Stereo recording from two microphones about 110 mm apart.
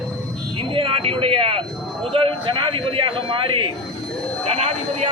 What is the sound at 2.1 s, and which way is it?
Speech, 50° right (ahead or behind).